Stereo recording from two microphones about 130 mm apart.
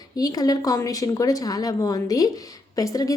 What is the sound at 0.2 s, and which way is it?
A woman's voice, 30° left (ahead or behind).